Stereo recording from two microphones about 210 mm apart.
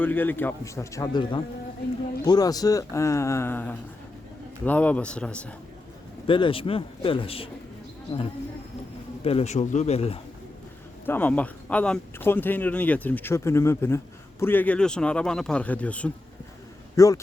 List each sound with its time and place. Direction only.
0.0 s speech: 10° left (ahead or behind)
6.2 s a man's voice: 25° left (ahead or behind)
9.2 s speech: 30° left (ahead or behind)
11.0 s a man's voice: 10° left (ahead or behind)